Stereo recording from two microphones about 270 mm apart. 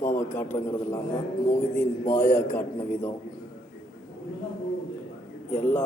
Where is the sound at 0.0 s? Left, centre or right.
Centre.